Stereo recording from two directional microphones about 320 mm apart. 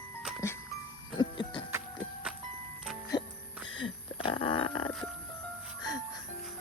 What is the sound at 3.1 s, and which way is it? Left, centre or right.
Music, centre.